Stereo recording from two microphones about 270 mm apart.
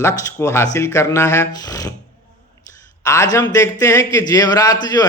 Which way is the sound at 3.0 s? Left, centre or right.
Centre.